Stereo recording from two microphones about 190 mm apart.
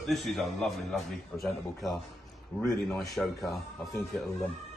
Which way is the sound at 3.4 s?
15° left (ahead or behind).